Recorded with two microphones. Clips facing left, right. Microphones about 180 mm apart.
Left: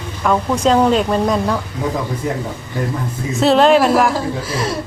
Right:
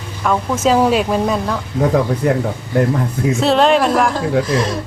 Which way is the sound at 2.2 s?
70° right (ahead or behind).